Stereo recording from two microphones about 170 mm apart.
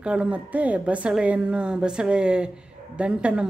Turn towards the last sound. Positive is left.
turn(degrees=-5)  # may be behind; listen again after turning